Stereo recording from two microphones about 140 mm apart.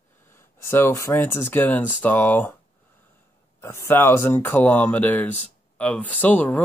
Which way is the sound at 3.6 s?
20° left (ahead or behind).